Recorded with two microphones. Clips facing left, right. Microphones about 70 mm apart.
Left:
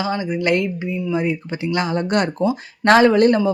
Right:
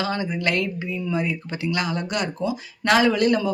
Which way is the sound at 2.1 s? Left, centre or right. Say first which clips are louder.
Left 7 dB; left.